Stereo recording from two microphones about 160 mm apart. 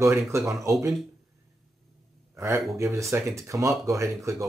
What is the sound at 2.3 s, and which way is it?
Speech, 20° right (ahead or behind).